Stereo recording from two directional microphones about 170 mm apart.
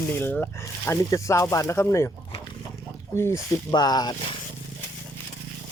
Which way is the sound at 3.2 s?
15° left (ahead or behind).